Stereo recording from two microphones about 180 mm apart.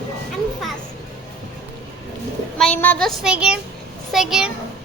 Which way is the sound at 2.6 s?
10° left (ahead or behind).